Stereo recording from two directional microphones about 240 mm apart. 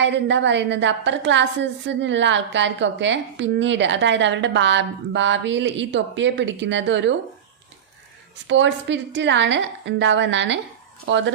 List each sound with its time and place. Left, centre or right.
0.0 s a woman's voice: right
8.4 s a woman's voice: right